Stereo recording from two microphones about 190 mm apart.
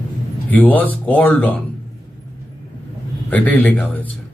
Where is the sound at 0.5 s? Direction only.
10° left (ahead or behind).